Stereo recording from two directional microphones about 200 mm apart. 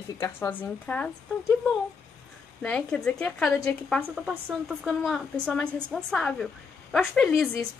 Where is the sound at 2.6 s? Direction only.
5° left (ahead or behind).